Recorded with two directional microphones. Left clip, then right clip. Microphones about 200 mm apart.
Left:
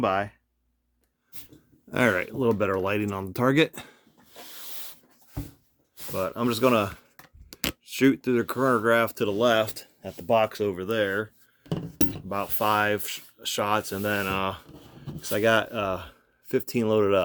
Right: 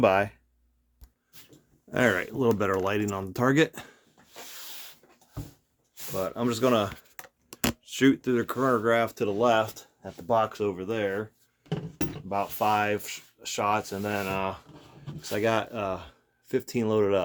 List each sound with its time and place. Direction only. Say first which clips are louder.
0.0 s speech: right 3 dB; 10° right (ahead or behind)
1.9 s speech: left 1 dB; 25° left (ahead or behind)
6.1 s speech: left 2 dB; 40° left (ahead or behind)